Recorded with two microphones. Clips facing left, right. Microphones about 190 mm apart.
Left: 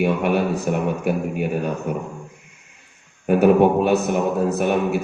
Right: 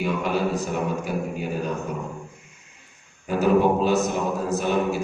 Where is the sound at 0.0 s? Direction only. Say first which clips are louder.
Left 5 dB; 60° left (ahead or behind).